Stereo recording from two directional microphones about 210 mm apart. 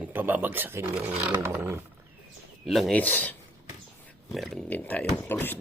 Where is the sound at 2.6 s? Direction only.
Centre (ahead or behind).